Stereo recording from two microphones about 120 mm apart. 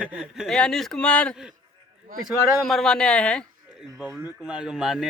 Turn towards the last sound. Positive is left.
turn(degrees=-5)  # may be behind; listen again after turning